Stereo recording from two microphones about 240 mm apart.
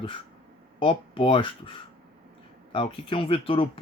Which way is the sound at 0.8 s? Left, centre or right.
Left.